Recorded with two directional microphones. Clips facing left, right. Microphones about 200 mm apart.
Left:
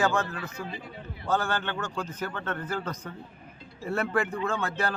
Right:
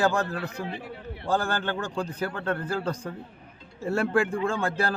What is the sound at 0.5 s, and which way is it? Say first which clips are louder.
Speech: right 4 dB; 65° right (ahead or behind).